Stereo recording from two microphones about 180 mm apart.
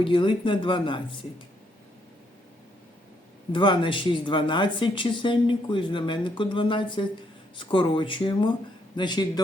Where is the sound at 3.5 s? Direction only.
25° left (ahead or behind).